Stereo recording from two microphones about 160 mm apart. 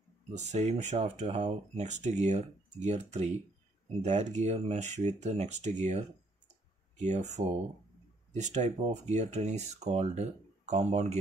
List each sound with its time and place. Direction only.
0.5 s speech: 45° right (ahead or behind)